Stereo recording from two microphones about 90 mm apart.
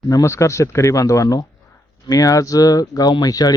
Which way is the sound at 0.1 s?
35° left (ahead or behind).